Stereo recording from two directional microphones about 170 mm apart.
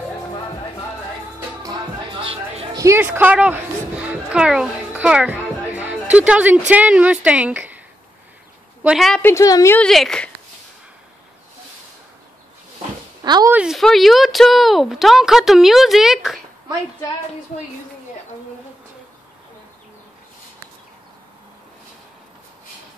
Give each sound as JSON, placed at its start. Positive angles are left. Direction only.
{"t": 1.6, "sound": "music", "side_deg": -25}
{"t": 2.7, "sound": "a sound", "side_deg": -15}
{"t": 6.1, "sound": "speech", "side_deg": -5}
{"t": 8.8, "sound": "speech", "side_deg": 0}
{"t": 9.2, "sound": "a woman's voice", "side_deg": 15}
{"t": 9.8, "sound": "speech", "side_deg": 5}
{"t": 13.2, "sound": "a sound", "side_deg": -25}
{"t": 13.5, "sound": "speech", "side_deg": -5}